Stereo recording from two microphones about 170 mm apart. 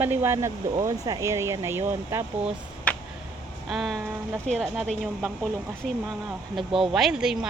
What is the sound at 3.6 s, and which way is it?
Speech, centre (ahead or behind).